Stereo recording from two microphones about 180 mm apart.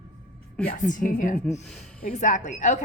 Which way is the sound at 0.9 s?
45° left (ahead or behind).